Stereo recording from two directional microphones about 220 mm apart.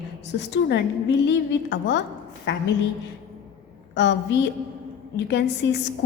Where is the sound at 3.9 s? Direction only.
55° left (ahead or behind).